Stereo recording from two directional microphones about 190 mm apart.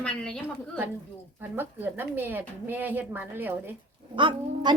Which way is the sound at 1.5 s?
10° right (ahead or behind).